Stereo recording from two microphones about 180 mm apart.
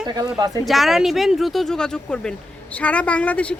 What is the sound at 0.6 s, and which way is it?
A woman's voice, centre (ahead or behind).